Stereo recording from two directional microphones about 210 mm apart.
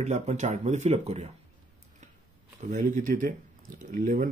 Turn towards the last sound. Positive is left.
turn(degrees=-40)  # may be behind; listen again after turning